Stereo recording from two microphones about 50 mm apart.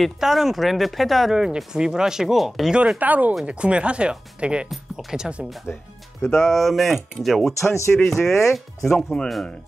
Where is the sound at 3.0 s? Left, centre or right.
Right; by 5.5 s centre.